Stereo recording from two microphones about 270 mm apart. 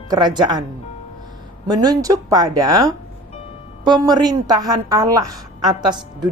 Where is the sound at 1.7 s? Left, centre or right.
Centre.